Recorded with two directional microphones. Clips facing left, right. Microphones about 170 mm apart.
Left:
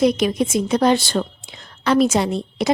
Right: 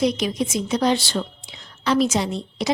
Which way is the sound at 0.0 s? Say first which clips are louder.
Left 4 dB; 55° left (ahead or behind).